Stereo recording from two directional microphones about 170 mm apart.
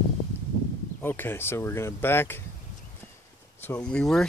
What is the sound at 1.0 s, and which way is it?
Speech, 10° left (ahead or behind).